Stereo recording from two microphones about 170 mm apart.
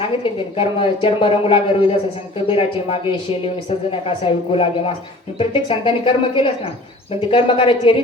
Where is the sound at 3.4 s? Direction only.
30° left (ahead or behind).